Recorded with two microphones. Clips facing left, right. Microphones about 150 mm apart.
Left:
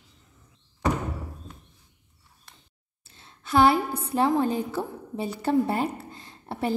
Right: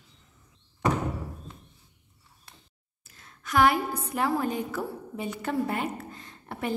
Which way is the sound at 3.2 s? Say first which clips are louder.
Left 3 dB; 30° left (ahead or behind).